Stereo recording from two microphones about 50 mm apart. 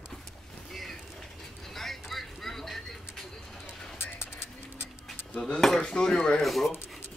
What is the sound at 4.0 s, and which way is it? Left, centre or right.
Music, left.